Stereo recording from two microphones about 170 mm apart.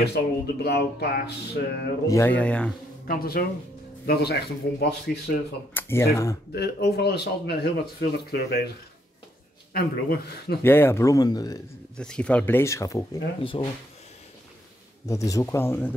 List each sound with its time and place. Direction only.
0.0 s speech: 75° left (ahead or behind)
2.0 s speech: 15° left (ahead or behind)
3.1 s speech: 60° left (ahead or behind)
5.8 s speech: 15° left (ahead or behind)
6.5 s speech: 75° left (ahead or behind)
9.8 s speech: 65° left (ahead or behind)
10.6 s speech: 15° left (ahead or behind)
12.0 s speech: 5° left (ahead or behind)
13.4 s speech: 30° left (ahead or behind)
15.0 s speech: 20° left (ahead or behind)